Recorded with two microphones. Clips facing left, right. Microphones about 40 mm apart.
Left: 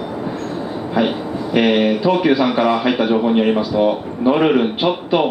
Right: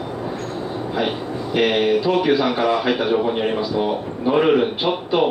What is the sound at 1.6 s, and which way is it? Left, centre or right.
Speech, centre.